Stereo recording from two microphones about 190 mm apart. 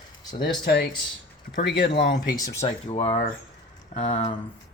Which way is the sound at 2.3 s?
20° left (ahead or behind).